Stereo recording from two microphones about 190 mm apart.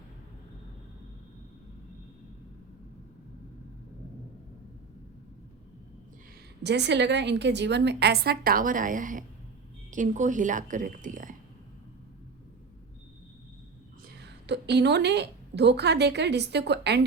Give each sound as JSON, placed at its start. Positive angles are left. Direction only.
{"t": 6.6, "sound": "a woman's voice", "side_deg": -60}
{"t": 14.2, "sound": "a woman's voice", "side_deg": -65}